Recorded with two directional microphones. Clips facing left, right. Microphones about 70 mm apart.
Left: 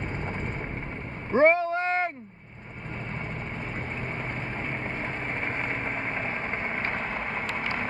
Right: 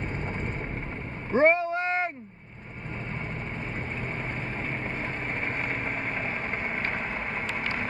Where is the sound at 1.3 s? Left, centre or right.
Left.